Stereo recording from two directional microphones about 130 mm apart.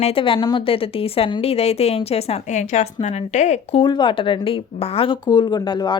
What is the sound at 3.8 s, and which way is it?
A woman's voice, 35° left (ahead or behind).